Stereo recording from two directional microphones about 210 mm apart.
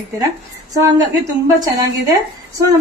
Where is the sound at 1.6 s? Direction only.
15° right (ahead or behind).